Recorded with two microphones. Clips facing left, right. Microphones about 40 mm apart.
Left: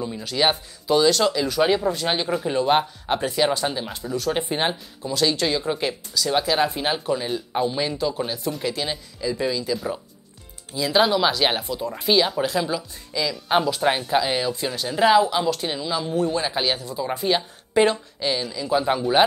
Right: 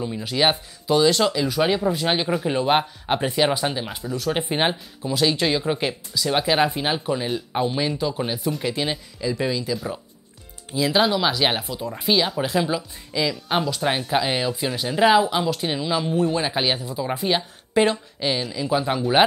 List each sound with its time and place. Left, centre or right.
0.0 s speech: centre
4.0 s speech: centre
4.3 s speech: centre
6.7 s speech: centre
11.0 s speech: centre
13.5 s speech: centre